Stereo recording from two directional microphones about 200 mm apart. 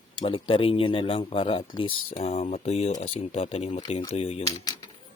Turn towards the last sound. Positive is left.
turn(degrees=30)  # may be behind; listen again after turning